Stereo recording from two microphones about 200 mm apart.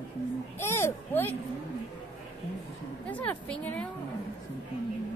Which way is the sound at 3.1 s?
5° left (ahead or behind).